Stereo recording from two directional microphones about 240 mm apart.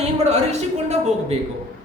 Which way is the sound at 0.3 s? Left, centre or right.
Right.